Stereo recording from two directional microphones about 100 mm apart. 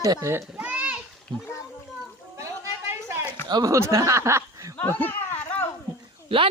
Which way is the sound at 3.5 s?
45° right (ahead or behind).